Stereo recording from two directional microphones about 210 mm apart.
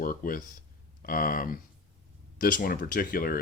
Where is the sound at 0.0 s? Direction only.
40° left (ahead or behind).